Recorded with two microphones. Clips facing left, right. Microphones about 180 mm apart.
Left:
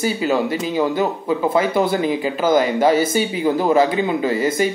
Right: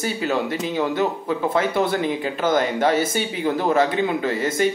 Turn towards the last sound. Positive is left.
turn(degrees=5)  # may be behind; listen again after turning